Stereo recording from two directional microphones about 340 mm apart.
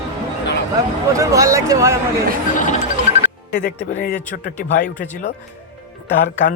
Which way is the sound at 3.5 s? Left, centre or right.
Left.